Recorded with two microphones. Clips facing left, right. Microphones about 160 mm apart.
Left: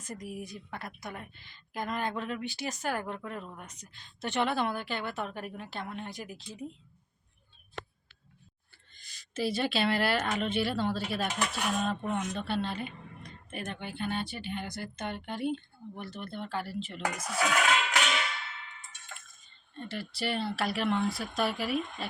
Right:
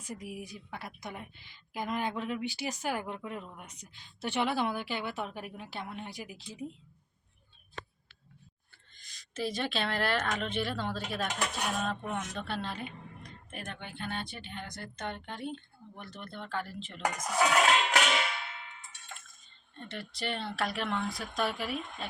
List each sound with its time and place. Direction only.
0.0 s a woman's voice: 10° right (ahead or behind)
9.0 s speech: 5° left (ahead or behind)
17.3 s music: 30° right (ahead or behind)
19.7 s speech: 5° left (ahead or behind)